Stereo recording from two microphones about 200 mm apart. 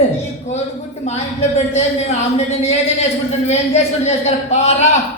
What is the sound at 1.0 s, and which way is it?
A man's voice, 35° left (ahead or behind).